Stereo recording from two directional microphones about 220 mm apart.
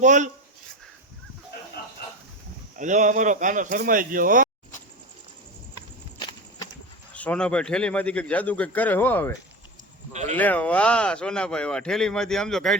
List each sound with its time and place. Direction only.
0.0 s speech: 35° right (ahead or behind)
2.7 s speech: 35° right (ahead or behind)
7.1 s a man's voice: 5° left (ahead or behind)
10.1 s speech: 30° right (ahead or behind)
10.3 s speech: 5° left (ahead or behind)